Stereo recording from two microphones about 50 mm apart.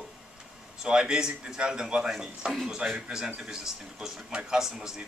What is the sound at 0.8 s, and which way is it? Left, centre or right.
Speech, centre.